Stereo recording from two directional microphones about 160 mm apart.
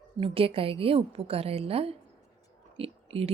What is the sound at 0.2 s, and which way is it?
Speech, 35° right (ahead or behind).